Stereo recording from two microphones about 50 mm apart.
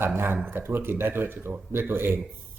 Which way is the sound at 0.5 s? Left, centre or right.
Right.